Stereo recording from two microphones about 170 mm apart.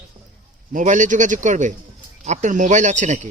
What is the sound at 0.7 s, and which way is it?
Speech, 45° right (ahead or behind).